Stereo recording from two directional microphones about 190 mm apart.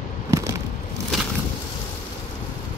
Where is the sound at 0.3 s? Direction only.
15° right (ahead or behind).